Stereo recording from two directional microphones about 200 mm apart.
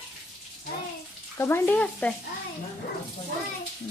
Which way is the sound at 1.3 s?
10° left (ahead or behind).